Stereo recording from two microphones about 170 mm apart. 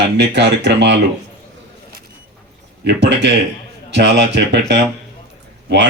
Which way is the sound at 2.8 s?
90° right.